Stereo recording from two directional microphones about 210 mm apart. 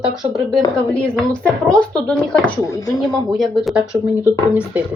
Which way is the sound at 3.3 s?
Centre (ahead or behind).